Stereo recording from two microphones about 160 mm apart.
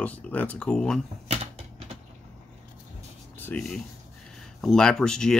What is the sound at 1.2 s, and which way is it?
Typing, 35° right (ahead or behind).